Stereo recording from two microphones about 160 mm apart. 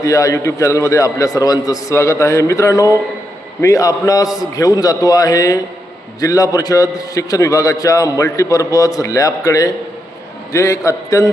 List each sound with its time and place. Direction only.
0.0 s a man's voice: 20° left (ahead or behind)